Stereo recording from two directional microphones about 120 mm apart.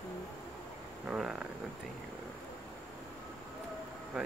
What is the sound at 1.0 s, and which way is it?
Speech, 5° right (ahead or behind).